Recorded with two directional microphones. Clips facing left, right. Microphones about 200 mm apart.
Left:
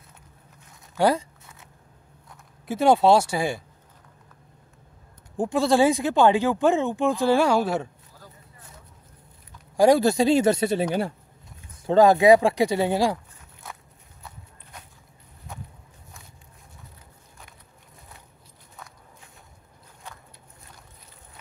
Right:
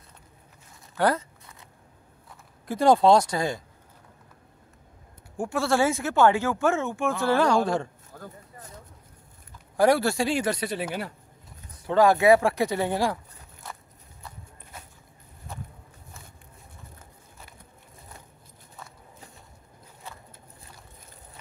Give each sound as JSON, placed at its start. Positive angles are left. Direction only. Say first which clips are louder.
{"t": 0.9, "sound": "speech", "louder": "left 3 dB", "side_deg": 10}
{"t": 2.2, "sound": "speech", "louder": "left 2 dB", "side_deg": 5}
{"t": 5.4, "sound": "speech", "louder": "left 4 dB", "side_deg": 20}
{"t": 8.1, "sound": "a sound", "louder": "right 7 dB", "side_deg": -50}
{"t": 9.8, "sound": "speech", "louder": "left 4 dB", "side_deg": 15}
{"t": 11.9, "sound": "speech", "louder": "left 3 dB", "side_deg": 20}